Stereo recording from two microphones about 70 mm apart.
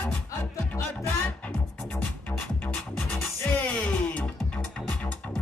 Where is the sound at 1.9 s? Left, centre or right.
Left.